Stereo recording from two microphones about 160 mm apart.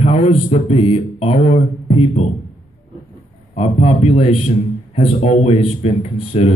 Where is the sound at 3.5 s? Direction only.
40° left (ahead or behind).